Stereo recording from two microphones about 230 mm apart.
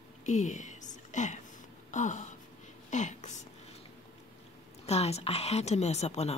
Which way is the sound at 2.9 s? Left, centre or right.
Left.